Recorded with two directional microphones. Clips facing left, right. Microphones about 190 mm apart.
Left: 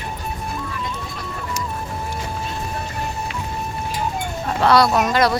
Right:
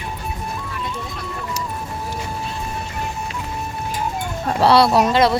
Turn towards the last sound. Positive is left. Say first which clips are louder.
# right 2 dB
turn(degrees=-25)  # may be behind; listen again after turning